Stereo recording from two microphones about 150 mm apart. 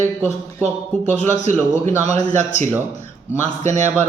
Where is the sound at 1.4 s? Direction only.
50° right (ahead or behind).